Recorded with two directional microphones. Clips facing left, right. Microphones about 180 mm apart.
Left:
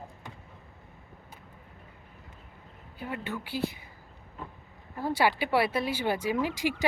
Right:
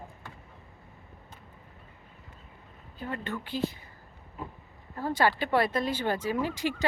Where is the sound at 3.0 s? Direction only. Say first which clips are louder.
Even; 10° left (ahead or behind).